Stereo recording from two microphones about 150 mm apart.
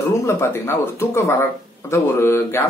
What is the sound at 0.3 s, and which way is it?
A man's voice, 15° left (ahead or behind).